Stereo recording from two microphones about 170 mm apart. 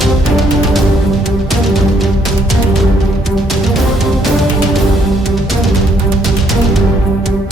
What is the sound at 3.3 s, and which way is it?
Music, centre (ahead or behind).